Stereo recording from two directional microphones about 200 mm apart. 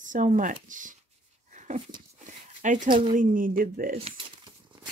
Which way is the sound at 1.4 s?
35° right (ahead or behind).